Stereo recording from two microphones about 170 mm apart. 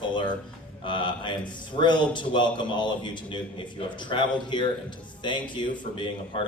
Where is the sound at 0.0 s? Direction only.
25° left (ahead or behind).